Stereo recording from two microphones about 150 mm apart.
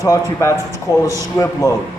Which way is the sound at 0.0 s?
20° left (ahead or behind).